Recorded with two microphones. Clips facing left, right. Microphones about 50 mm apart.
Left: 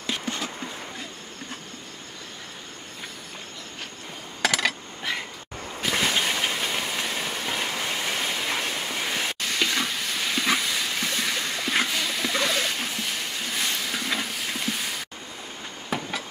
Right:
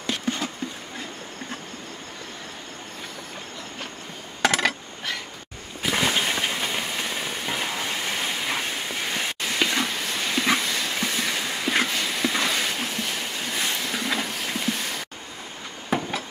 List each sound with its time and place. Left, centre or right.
0.2 s a sound: centre
5.8 s train: centre
15.9 s train: centre